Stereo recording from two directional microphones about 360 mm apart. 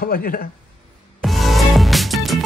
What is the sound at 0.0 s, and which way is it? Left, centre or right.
Speech, left.